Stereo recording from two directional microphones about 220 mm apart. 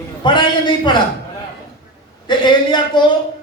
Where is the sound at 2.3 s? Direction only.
20° left (ahead or behind).